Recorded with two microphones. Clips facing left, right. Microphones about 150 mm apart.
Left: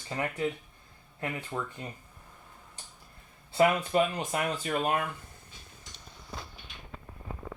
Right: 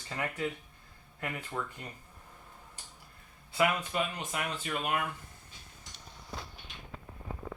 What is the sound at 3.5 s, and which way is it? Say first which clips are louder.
Speech: left 5 dB; 40° left (ahead or behind).